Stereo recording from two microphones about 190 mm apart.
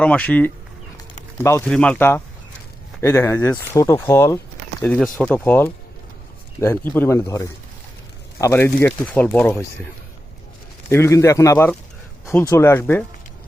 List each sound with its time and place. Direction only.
0.0 s speech: 5° left (ahead or behind)
10.8 s speech: 15° left (ahead or behind)